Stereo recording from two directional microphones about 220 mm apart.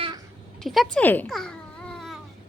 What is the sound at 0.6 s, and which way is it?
Speech, centre (ahead or behind).